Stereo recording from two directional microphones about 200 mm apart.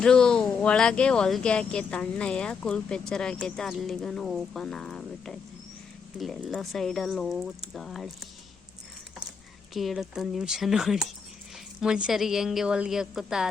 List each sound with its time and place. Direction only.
0.0 s speech: 5° left (ahead or behind)
9.7 s speech: centre (ahead or behind)